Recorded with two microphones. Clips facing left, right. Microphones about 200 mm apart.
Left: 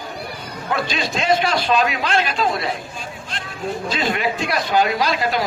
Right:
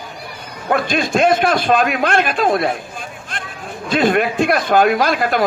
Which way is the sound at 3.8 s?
55° right (ahead or behind).